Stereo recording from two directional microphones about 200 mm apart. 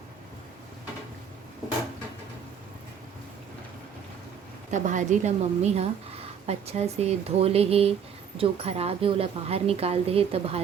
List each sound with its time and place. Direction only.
4.7 s a woman's voice: 40° right (ahead or behind)